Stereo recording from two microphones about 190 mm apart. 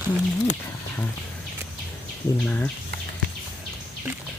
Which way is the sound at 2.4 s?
5° left (ahead or behind).